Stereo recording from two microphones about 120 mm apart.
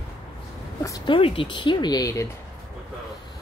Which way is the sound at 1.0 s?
45° left (ahead or behind).